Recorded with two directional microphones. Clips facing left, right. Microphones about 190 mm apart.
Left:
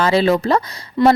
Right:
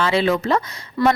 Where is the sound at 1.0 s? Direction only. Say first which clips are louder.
Left 4 dB; 25° left (ahead or behind).